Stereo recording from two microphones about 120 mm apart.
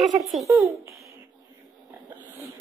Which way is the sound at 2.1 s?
15° right (ahead or behind).